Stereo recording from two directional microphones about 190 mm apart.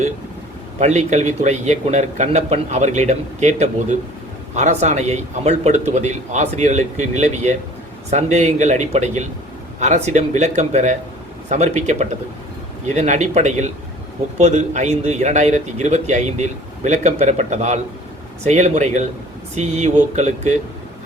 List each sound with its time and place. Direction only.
0.8 s a man's voice: 35° right (ahead or behind)